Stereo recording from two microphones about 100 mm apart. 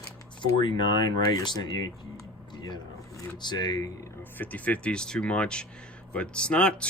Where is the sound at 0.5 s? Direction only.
50° left (ahead or behind).